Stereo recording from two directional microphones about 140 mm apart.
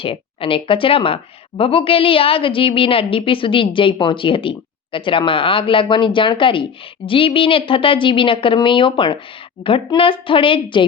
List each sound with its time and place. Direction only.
0.0 s speech: 40° left (ahead or behind)